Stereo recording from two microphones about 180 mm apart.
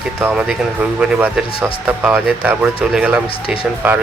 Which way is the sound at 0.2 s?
10° right (ahead or behind).